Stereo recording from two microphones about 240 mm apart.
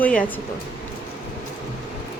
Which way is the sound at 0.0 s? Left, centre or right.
Centre.